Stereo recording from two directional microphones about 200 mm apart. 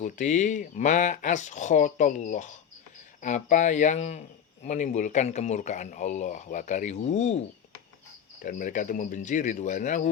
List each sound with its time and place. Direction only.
0.0 s speech: 40° left (ahead or behind)